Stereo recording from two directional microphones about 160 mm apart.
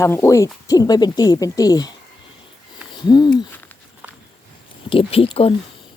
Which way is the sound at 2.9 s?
25° left (ahead or behind).